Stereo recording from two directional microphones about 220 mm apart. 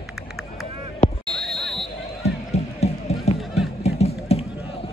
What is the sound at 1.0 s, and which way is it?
Basketball bounce, 35° left (ahead or behind).